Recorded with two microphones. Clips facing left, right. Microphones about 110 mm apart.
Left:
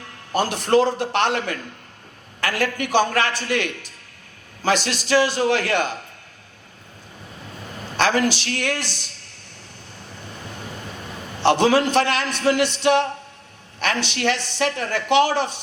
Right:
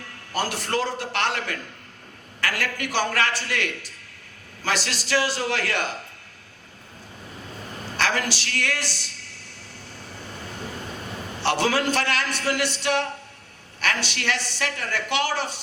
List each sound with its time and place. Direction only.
0.3 s a woman's voice: 20° left (ahead or behind)
7.9 s a man's voice: 20° left (ahead or behind)
11.4 s a woman's voice: 20° left (ahead or behind)